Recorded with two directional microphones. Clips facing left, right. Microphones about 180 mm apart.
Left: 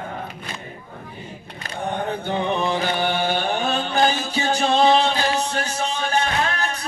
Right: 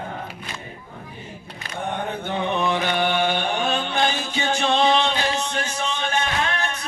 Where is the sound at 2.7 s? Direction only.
35° left (ahead or behind).